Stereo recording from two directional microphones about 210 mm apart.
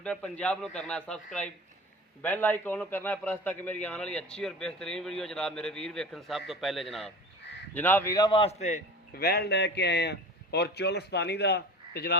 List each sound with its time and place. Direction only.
0.0 s a man's voice: 5° left (ahead or behind); by 8.8 s 30° left (ahead or behind)
9.1 s a man's voice: 50° left (ahead or behind)